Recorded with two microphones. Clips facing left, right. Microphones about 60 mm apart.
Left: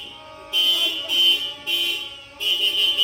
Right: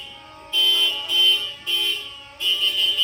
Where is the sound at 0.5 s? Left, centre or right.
Right.